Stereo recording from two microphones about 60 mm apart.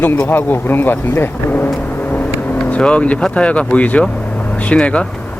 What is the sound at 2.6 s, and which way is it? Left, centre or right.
Speech, centre.